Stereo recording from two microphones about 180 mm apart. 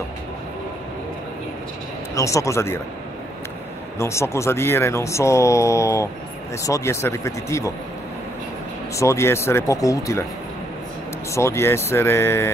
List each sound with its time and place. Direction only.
2.1 s speech: 15° left (ahead or behind)
4.0 s speech: 15° left (ahead or behind)
8.9 s speech: 15° left (ahead or behind)
11.3 s speech: 15° left (ahead or behind)